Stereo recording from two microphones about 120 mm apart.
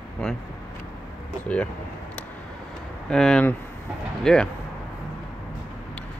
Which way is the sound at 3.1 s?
5° left (ahead or behind).